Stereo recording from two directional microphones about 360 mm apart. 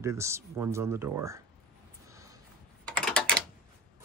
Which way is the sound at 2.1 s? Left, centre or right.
Centre.